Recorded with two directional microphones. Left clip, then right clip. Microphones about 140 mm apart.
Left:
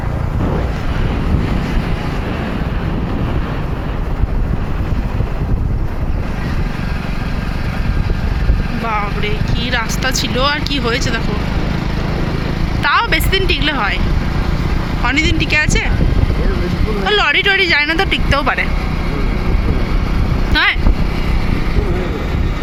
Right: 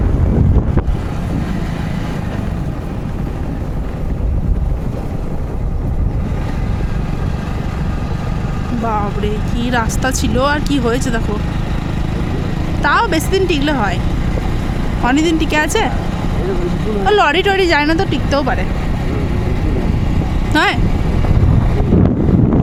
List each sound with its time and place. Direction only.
9.2 s speech: 65° right (ahead or behind)
12.9 s speech: 55° right (ahead or behind)
15.0 s speech: 70° right (ahead or behind)
17.1 s speech: 70° right (ahead or behind)
17.9 s speech: 40° right (ahead or behind)
20.5 s speech: 65° right (ahead or behind)